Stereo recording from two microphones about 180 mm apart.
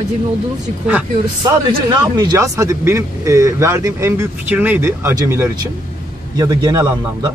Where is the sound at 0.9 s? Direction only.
10° right (ahead or behind).